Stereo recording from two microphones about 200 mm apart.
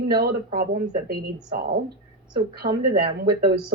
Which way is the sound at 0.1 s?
50° right (ahead or behind).